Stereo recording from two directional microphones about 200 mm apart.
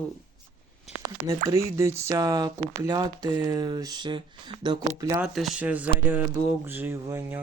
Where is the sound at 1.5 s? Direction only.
15° right (ahead or behind).